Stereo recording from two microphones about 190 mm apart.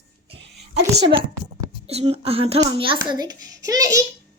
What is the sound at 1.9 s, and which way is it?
A child's voice, 35° right (ahead or behind).